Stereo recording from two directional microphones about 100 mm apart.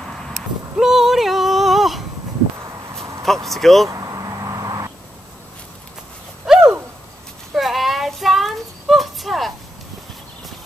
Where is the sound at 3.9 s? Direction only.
35° right (ahead or behind).